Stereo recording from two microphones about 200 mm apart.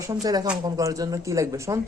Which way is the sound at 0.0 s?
15° right (ahead or behind).